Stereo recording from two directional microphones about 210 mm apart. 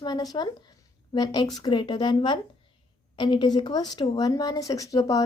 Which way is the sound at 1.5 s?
20° left (ahead or behind).